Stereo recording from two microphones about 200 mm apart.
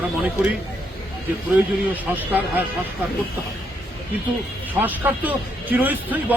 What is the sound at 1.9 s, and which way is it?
Speech, 10° right (ahead or behind).